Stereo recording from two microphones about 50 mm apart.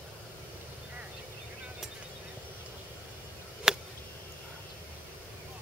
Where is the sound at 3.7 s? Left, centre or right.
Centre.